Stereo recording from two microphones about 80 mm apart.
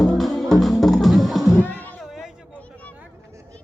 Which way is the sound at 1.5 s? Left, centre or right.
Left.